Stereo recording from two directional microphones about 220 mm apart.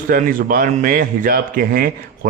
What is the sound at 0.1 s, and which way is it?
Speech, 40° right (ahead or behind).